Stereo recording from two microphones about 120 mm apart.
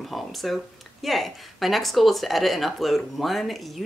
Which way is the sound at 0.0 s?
Centre (ahead or behind).